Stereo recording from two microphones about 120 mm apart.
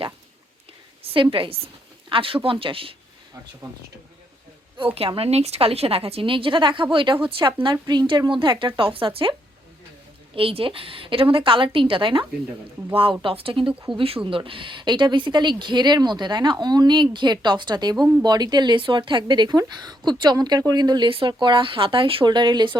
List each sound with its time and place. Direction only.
1.1 s a woman's voice: 45° right (ahead or behind)
4.9 s a woman's voice: 50° right (ahead or behind)
10.3 s a woman's voice: 50° right (ahead or behind)